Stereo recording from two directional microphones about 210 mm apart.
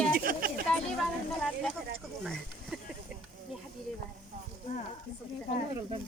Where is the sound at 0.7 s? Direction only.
5° left (ahead or behind).